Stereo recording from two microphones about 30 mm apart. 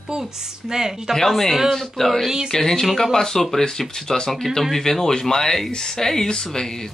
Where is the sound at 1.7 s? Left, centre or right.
Centre.